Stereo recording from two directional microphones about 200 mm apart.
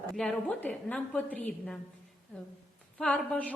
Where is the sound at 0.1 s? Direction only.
5° left (ahead or behind).